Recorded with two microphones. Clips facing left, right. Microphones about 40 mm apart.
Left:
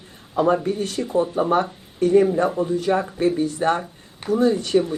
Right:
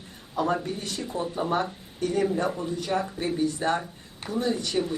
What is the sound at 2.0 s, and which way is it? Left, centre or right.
Speech, left.